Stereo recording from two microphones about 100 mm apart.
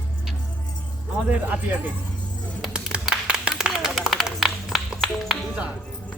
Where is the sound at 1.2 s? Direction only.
15° right (ahead or behind).